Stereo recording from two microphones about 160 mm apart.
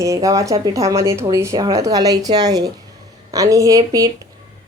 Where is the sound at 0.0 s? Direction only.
20° right (ahead or behind).